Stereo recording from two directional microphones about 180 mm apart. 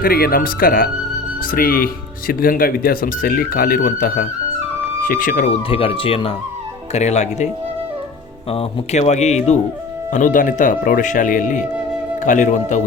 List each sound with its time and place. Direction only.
0.0 s speech: 55° left (ahead or behind)
5.6 s speech: 30° left (ahead or behind)
8.4 s speech: 35° left (ahead or behind)